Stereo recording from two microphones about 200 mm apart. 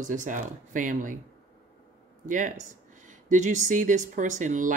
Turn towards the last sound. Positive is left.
turn(degrees=-40)  # may be behind; listen again after turning